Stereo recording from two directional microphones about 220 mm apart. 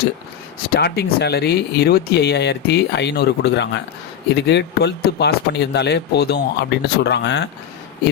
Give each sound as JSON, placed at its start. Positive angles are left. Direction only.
{"t": 0.7, "sound": "speech", "side_deg": 45}